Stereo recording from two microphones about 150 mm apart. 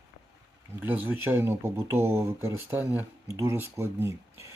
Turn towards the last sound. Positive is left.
turn(degrees=-20)  # may be behind; listen again after turning